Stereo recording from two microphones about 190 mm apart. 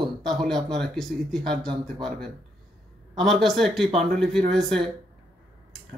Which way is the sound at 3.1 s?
Centre (ahead or behind).